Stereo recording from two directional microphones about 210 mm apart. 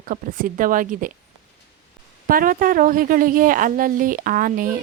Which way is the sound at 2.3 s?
40° right (ahead or behind).